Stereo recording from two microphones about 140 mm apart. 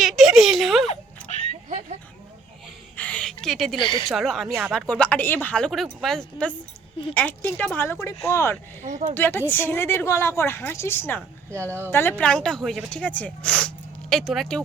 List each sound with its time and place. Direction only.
0.0 s speech: centre (ahead or behind)
0.9 s music: 55° left (ahead or behind)
2.9 s a sound: 10° left (ahead or behind)
3.8 s speech: 35° left (ahead or behind)
4.1 s speech: centre (ahead or behind); by 8.5 s 20° left (ahead or behind)
8.8 s speech: 60° right (ahead or behind)
9.1 s speech: 15° left (ahead or behind)
11.5 s speech: 20° right (ahead or behind)
11.9 s speech: 15° left (ahead or behind)